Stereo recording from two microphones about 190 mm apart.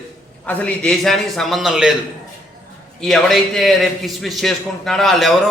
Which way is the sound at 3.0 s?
Centre (ahead or behind).